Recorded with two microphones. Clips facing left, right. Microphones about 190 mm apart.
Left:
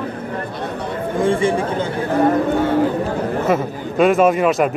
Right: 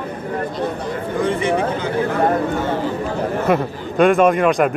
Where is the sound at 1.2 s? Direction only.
30° left (ahead or behind).